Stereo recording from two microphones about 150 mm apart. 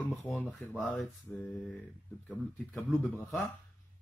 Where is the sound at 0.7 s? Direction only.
Centre (ahead or behind).